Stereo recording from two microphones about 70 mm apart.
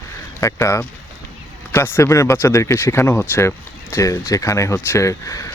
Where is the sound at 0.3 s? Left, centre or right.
Left.